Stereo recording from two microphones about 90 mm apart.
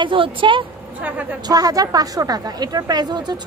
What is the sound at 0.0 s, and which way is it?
Speech, 70° right (ahead or behind).